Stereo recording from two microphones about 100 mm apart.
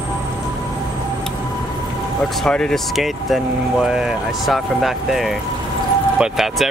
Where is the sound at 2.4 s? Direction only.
5° left (ahead or behind).